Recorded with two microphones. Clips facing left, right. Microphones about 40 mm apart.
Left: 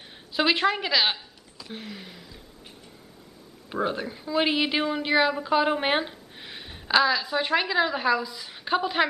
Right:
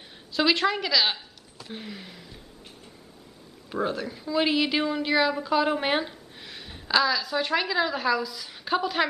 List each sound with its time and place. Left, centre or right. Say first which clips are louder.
0.3 s a woman's voice: even; centre
1.7 s a sound: even; centre
3.7 s a woman's voice: left 1 dB; centre